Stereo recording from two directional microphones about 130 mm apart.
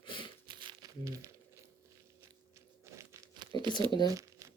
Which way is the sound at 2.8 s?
20° right (ahead or behind).